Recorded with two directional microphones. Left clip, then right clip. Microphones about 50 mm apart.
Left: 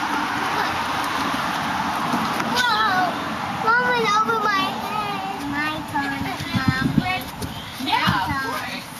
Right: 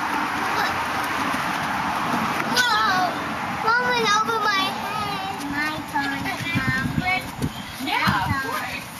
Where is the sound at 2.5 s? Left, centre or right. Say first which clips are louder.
Even; right.